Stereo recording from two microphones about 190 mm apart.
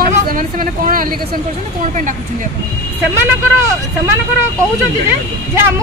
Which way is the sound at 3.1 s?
15° right (ahead or behind).